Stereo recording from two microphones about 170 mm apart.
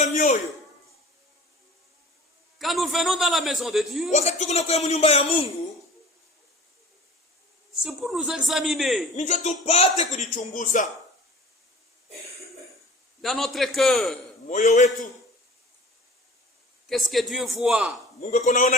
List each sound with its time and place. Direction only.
0.0 s a sound: 45° left (ahead or behind)
2.6 s a man's voice: centre (ahead or behind)
4.1 s a man's voice: 40° left (ahead or behind)
7.8 s a man's voice: centre (ahead or behind)
9.1 s speech: 45° left (ahead or behind)
13.2 s a man's voice: centre (ahead or behind)
14.4 s a man's voice: 45° left (ahead or behind)
16.9 s a man's voice: centre (ahead or behind)
18.2 s speech: 45° left (ahead or behind)